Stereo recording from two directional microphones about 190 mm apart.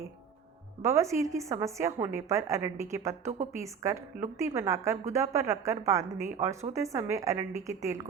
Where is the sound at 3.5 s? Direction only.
15° right (ahead or behind).